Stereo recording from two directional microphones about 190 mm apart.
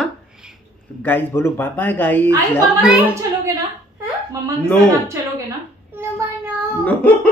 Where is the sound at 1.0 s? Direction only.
10° left (ahead or behind).